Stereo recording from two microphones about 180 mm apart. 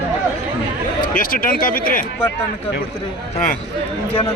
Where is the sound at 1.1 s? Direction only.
50° left (ahead or behind).